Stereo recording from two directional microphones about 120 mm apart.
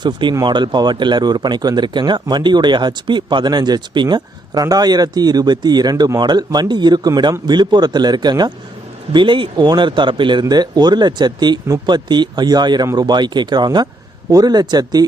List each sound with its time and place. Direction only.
0.0 s speech: 40° right (ahead or behind)